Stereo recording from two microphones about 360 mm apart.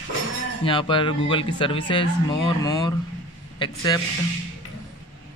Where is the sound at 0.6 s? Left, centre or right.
Centre.